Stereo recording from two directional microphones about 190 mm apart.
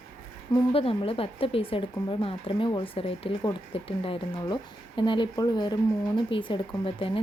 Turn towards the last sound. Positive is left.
turn(degrees=30)  # may be behind; listen again after turning